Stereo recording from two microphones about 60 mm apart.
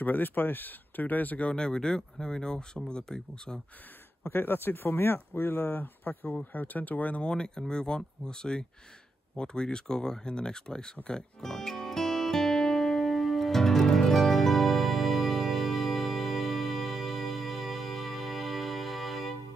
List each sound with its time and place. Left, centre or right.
0.0 s speech: left
1.5 s speech: centre
4.3 s speech: left; by 10.9 s centre
11.4 s music: centre